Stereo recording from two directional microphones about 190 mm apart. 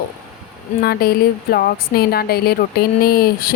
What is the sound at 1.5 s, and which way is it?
Speech, 55° left (ahead or behind).